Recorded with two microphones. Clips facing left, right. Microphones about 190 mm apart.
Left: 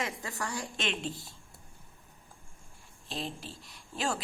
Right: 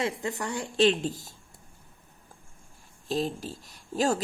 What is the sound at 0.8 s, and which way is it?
Speech, 40° right (ahead or behind).